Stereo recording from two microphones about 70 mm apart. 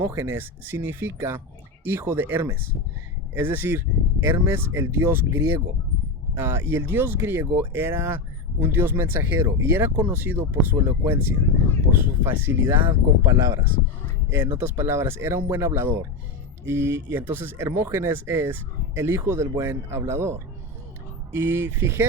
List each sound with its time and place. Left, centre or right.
0.0 s speech: right
14.3 s speech: right